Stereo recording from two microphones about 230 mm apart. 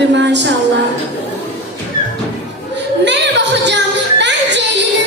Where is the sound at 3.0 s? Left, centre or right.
Right.